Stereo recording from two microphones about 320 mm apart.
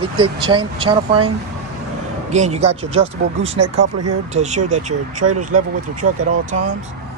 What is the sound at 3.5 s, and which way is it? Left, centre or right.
Speech, right.